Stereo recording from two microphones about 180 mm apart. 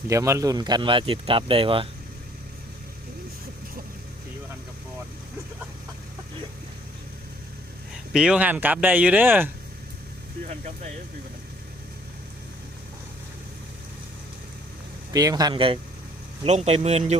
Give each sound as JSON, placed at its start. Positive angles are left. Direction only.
{"t": 0.1, "sound": "speech", "side_deg": -15}
{"t": 8.1, "sound": "speech", "side_deg": -5}
{"t": 10.4, "sound": "speech", "side_deg": -45}
{"t": 15.1, "sound": "speech", "side_deg": -20}